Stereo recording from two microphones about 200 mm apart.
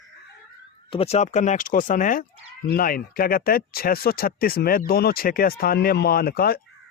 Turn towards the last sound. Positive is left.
turn(degrees=50)  # may be behind; listen again after turning